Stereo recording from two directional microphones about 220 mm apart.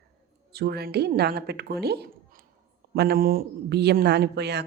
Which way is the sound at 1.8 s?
45° right (ahead or behind).